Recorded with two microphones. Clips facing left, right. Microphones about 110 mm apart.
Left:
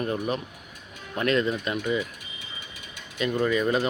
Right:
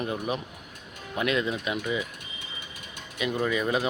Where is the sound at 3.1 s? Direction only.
10° right (ahead or behind).